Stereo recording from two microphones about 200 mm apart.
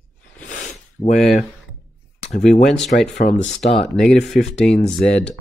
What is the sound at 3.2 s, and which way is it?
Speech, 40° left (ahead or behind).